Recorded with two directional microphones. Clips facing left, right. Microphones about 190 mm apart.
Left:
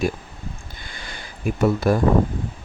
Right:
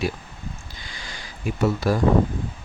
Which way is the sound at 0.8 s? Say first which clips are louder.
Left 3 dB; 55° left (ahead or behind).